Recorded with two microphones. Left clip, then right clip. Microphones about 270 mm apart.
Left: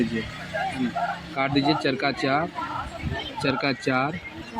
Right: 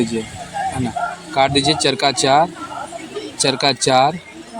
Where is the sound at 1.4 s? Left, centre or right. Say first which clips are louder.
Right 8 dB; right.